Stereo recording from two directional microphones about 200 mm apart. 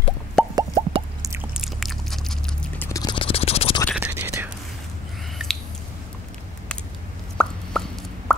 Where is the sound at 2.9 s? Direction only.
20° left (ahead or behind).